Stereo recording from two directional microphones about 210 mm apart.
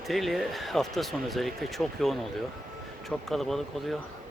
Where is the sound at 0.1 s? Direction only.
Centre (ahead or behind).